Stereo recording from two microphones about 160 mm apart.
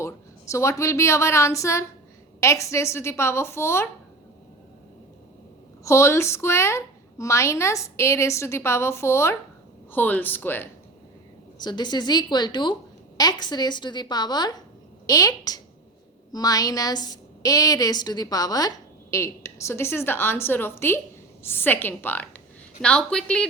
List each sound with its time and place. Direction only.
0.0 s a woman's voice: 20° left (ahead or behind)
5.8 s a woman's voice: 15° left (ahead or behind)
11.5 s a woman's voice: 25° left (ahead or behind); by 23.5 s 5° left (ahead or behind)